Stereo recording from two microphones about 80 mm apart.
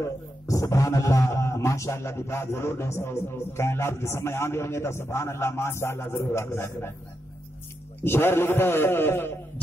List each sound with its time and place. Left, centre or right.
0.0 s speech: left
8.0 s a man's voice: left